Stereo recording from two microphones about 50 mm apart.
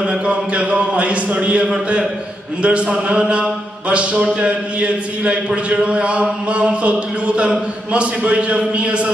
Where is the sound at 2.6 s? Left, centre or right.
Right.